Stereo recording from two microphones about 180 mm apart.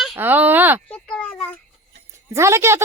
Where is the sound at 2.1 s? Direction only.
15° right (ahead or behind).